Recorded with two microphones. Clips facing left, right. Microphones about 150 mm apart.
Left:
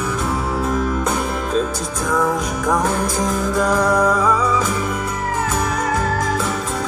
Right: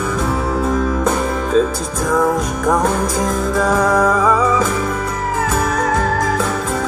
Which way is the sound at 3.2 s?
Centre (ahead or behind).